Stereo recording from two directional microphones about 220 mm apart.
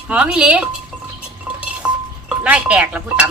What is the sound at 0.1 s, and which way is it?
Speech, 5° right (ahead or behind).